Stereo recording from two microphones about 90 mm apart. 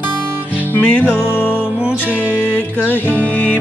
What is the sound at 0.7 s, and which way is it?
Music, 15° left (ahead or behind).